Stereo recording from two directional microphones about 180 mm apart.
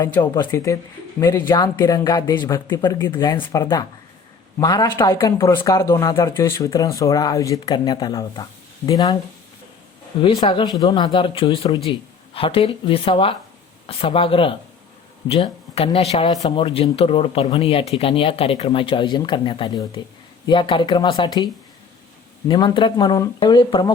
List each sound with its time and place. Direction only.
0.0 s speech: 15° left (ahead or behind)
10.2 s speech: 30° left (ahead or behind)